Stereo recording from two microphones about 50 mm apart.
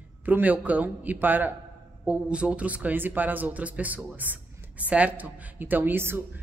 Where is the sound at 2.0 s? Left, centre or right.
Right.